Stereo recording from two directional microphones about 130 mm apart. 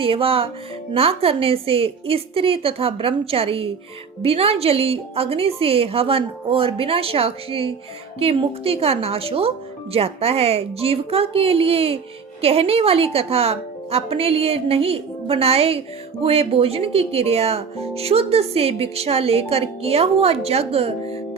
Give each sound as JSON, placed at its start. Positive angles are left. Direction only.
{"t": 0.0, "sound": "speech", "side_deg": -45}